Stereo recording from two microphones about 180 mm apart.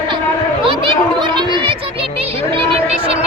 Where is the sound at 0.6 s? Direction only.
30° right (ahead or behind).